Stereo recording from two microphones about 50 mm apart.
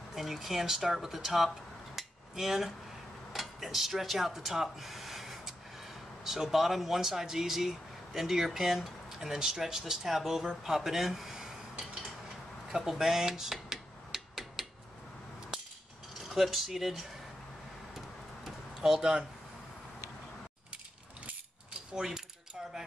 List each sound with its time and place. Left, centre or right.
0.1 s speech: centre
2.0 s hammer: centre
3.3 s speech: centre
12.7 s a sound: centre
16.3 s speech: centre
18.8 s speech: centre
21.9 s speech: centre